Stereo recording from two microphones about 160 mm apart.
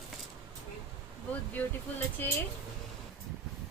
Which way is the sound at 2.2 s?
10° left (ahead or behind).